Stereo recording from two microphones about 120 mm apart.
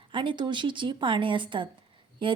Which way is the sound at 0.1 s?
45° right (ahead or behind).